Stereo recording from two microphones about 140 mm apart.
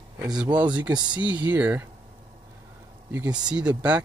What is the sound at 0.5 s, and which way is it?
Speech, 30° right (ahead or behind).